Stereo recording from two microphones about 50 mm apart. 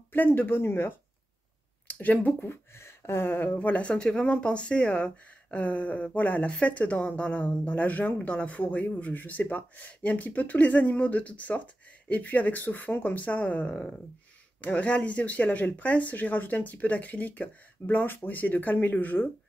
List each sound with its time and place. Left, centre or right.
0.1 s speech: left
1.9 s speech: left
2.4 s speech: left
3.5 s a woman's voice: left